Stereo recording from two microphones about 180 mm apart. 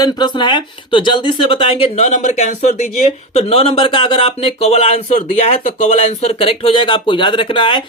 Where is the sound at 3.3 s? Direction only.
35° left (ahead or behind).